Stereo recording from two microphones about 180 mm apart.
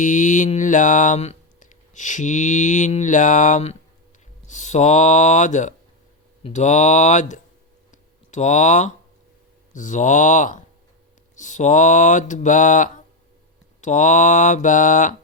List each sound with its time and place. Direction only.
0.0 s speech: 45° left (ahead or behind)
7.9 s a sound: 40° left (ahead or behind)
9.7 s speech: 45° left (ahead or behind)